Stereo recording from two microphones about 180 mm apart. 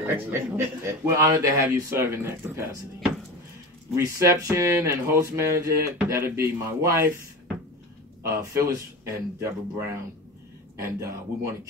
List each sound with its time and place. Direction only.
0.0 s speech: 15° right (ahead or behind)
3.9 s speech: 15° right (ahead or behind)
8.2 s speech: 15° right (ahead or behind)